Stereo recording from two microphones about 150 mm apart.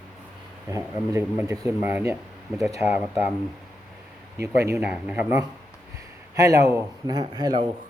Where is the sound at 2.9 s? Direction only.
50° left (ahead or behind).